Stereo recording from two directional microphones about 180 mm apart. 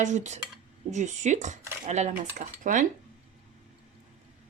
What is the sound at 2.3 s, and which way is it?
Speech, 45° right (ahead or behind).